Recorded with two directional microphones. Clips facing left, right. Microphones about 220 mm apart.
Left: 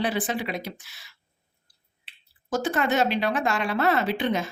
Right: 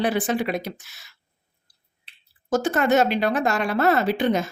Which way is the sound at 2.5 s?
45° right (ahead or behind).